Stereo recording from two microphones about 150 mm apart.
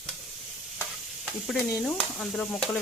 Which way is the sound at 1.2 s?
Centre (ahead or behind).